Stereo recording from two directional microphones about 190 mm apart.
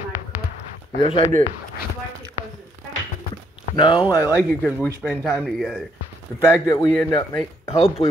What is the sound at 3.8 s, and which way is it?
Speech, 25° left (ahead or behind).